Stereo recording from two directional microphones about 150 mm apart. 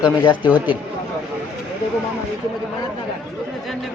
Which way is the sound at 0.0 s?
30° left (ahead or behind).